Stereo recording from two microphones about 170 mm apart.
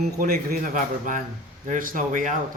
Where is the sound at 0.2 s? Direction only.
55° right (ahead or behind).